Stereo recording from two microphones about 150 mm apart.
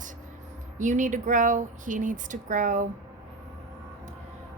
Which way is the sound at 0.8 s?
55° right (ahead or behind).